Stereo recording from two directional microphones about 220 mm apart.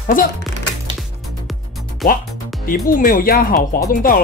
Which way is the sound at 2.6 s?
40° left (ahead or behind).